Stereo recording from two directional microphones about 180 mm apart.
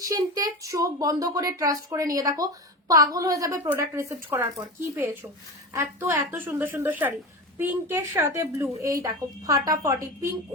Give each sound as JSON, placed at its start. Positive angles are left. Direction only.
{"t": 0.0, "sound": "a child's voice", "side_deg": -20}
{"t": 5.7, "sound": "a woman's voice", "side_deg": -10}